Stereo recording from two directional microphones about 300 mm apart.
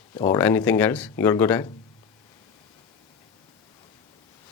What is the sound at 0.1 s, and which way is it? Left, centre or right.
A man's voice, centre.